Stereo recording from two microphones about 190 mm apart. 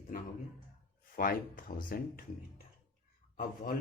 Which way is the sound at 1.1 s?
45° left (ahead or behind).